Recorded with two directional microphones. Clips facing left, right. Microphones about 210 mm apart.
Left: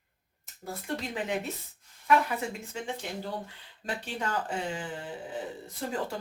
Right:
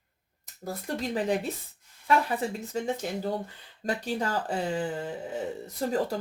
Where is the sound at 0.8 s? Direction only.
35° right (ahead or behind).